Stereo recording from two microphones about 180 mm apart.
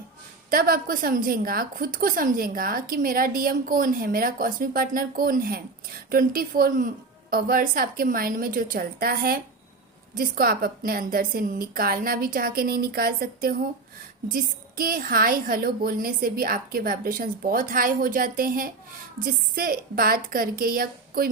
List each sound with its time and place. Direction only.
0.5 s a woman's voice: 55° right (ahead or behind)